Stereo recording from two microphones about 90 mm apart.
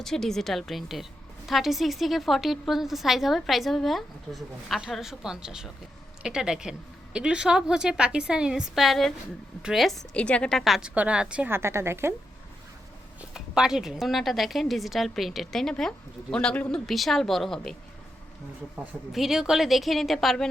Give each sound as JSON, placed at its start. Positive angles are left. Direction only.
{"t": 0.0, "sound": "a woman's voice", "side_deg": 5}
{"t": 10.2, "sound": "a woman's voice", "side_deg": 15}
{"t": 10.6, "sound": "a woman's voice", "side_deg": -5}
{"t": 11.4, "sound": "speech", "side_deg": -30}
{"t": 13.3, "sound": "a woman's voice", "side_deg": -10}
{"t": 19.1, "sound": "a woman's voice", "side_deg": -5}